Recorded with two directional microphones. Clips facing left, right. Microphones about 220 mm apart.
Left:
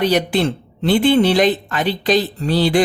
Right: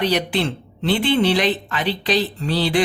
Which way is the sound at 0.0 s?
45° left (ahead or behind).